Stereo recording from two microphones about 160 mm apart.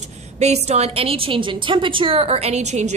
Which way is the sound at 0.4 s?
45° right (ahead or behind).